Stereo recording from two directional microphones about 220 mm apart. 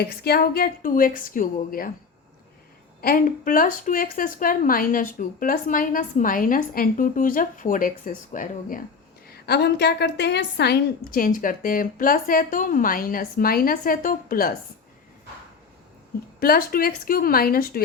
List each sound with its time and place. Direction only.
0.0 s speech: 45° left (ahead or behind)
3.0 s speech: 40° left (ahead or behind)
9.2 s speech: 45° left (ahead or behind)
16.4 s a woman's voice: 40° left (ahead or behind)